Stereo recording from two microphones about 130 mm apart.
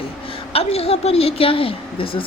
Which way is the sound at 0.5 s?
50° left (ahead or behind).